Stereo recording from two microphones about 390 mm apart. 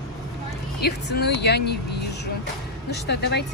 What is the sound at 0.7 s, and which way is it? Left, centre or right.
Speech, left.